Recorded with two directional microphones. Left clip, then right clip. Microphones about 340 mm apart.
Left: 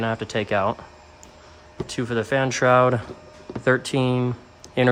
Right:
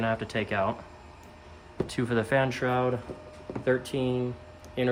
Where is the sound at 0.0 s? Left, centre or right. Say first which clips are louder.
Left 4 dB; centre.